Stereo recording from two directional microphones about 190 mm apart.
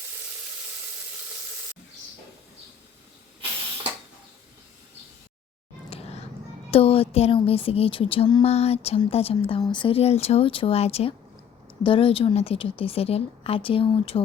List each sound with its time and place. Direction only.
5.9 s music: 35° left (ahead or behind)
6.7 s speech: 30° left (ahead or behind)